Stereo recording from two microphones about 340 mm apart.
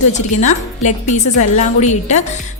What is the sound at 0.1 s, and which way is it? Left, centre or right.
A woman's voice, left.